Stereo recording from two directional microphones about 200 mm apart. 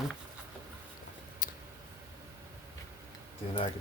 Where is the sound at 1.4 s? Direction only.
45° left (ahead or behind).